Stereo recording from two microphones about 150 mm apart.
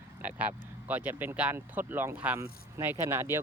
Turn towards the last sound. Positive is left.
turn(degrees=-15)  # may be behind; listen again after turning